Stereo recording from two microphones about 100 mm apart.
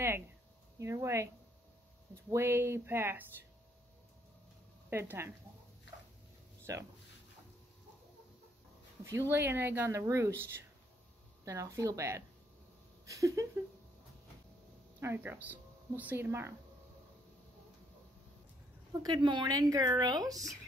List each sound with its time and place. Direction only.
0.7 s a woman's voice: 30° right (ahead or behind)
4.8 s speech: 20° right (ahead or behind)
6.7 s a woman's voice: 35° right (ahead or behind)
9.0 s a woman's voice: 25° right (ahead or behind)
13.0 s a sound: 30° right (ahead or behind)
15.0 s speech: 20° right (ahead or behind)
19.0 s a woman's voice: 50° right (ahead or behind)